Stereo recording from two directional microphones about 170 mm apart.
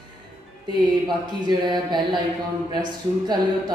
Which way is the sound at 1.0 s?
25° right (ahead or behind).